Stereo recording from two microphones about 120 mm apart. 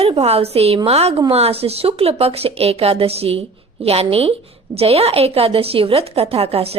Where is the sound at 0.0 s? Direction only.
55° right (ahead or behind).